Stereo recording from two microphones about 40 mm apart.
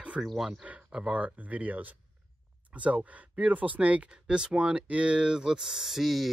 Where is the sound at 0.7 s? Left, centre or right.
Right.